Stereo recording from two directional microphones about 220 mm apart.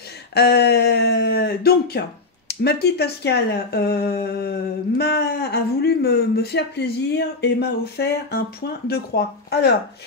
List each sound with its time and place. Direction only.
0.3 s speech: 50° left (ahead or behind)